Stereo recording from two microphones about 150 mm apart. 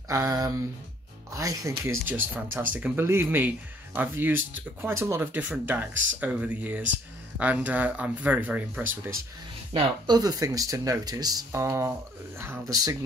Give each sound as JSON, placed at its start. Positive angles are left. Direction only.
{"t": 0.1, "sound": "speech", "side_deg": -25}
{"t": 10.0, "sound": "speech", "side_deg": -25}